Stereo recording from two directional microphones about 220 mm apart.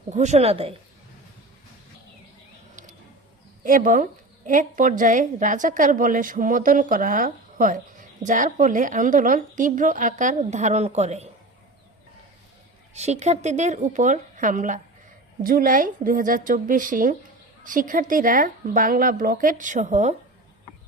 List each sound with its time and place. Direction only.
0.1 s a woman's voice: 30° right (ahead or behind)
3.6 s a woman's voice: 40° right (ahead or behind)
12.9 s a woman's voice: 30° right (ahead or behind)